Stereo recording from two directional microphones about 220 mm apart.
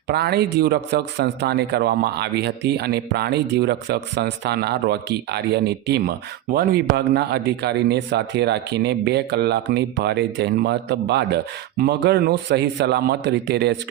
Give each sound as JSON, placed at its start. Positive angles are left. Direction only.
{"t": 0.1, "sound": "speech", "side_deg": -45}